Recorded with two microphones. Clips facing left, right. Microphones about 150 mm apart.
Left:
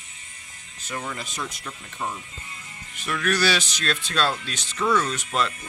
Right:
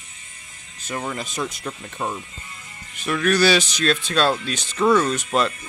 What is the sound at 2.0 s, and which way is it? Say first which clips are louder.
Speech: right 4 dB; 70° right (ahead or behind).